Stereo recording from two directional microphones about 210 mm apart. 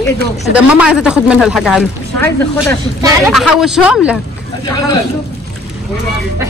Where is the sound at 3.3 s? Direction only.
Centre (ahead or behind).